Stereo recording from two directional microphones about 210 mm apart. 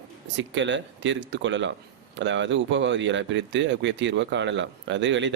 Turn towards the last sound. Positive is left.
turn(degrees=-60)  # may be behind; listen again after turning